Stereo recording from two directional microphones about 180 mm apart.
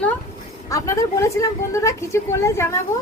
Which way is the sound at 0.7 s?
15° left (ahead or behind).